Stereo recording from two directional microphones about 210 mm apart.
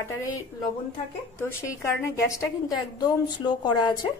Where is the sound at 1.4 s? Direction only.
15° left (ahead or behind).